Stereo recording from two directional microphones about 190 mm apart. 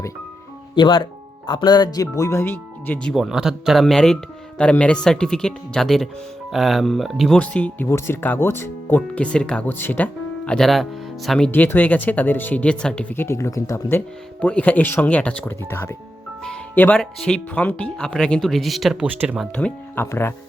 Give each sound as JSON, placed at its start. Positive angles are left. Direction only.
{"t": 0.8, "sound": "speech", "side_deg": 25}
{"t": 19.5, "sound": "speech", "side_deg": 10}